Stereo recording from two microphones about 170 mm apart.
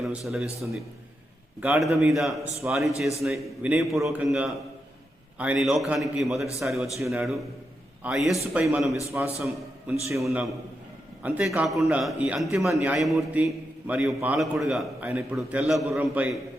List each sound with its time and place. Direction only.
0.0 s a man's voice: centre (ahead or behind)
1.6 s a man's voice: 5° right (ahead or behind)
9.1 s a man's voice: 10° right (ahead or behind)
10.2 s a man's voice: centre (ahead or behind)